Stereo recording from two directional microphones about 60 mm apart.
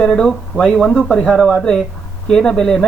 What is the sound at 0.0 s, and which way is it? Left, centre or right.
Speech, centre.